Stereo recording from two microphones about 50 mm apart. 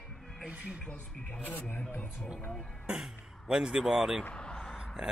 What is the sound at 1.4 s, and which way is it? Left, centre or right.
Speech, left.